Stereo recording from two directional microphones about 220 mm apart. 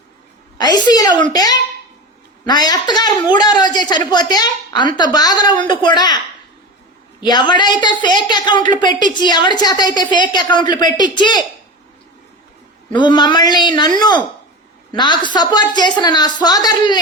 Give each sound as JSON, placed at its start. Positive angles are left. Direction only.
{"t": 0.6, "sound": "a woman's voice", "side_deg": 20}
{"t": 7.2, "sound": "a man's voice", "side_deg": 20}
{"t": 12.9, "sound": "a man's voice", "side_deg": 20}
{"t": 14.9, "sound": "a man's voice", "side_deg": 20}